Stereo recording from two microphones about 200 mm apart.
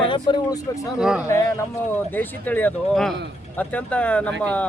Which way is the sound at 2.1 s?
10° left (ahead or behind).